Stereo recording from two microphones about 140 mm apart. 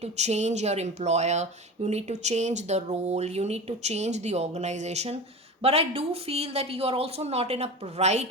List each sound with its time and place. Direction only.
0.0 s speech: 55° right (ahead or behind)